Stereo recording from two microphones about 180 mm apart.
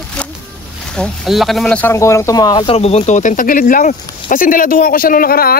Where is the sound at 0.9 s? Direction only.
Centre (ahead or behind).